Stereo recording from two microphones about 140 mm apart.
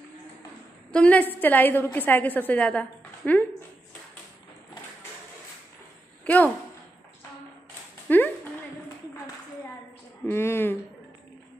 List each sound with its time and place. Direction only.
0.9 s a woman's voice: 10° left (ahead or behind)
6.2 s a woman's voice: 10° left (ahead or behind)
8.1 s a woman's voice: 15° left (ahead or behind)
10.2 s a woman's voice: 15° left (ahead or behind)